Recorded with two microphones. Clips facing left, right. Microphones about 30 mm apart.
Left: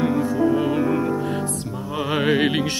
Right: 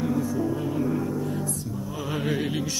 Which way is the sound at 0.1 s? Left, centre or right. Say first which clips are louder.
Left 6 dB; left.